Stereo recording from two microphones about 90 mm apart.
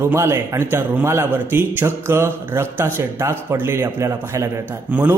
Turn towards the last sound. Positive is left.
turn(degrees=-15)  # may be behind; listen again after turning